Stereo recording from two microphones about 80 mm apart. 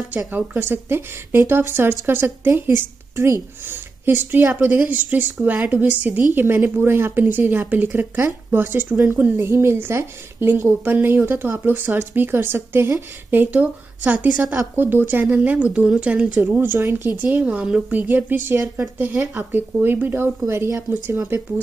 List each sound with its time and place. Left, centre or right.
0.3 s a woman's voice: right
16.5 s a woman's voice: right